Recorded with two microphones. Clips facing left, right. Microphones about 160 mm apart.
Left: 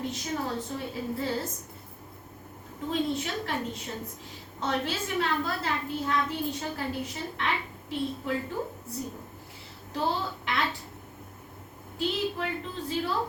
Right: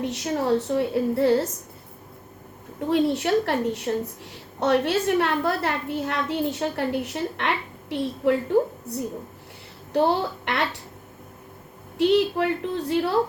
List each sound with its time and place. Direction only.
0.0 s a woman's voice: 70° right (ahead or behind)
2.8 s a woman's voice: 70° right (ahead or behind)
9.9 s speech: 65° right (ahead or behind)
11.9 s a woman's voice: 70° right (ahead or behind)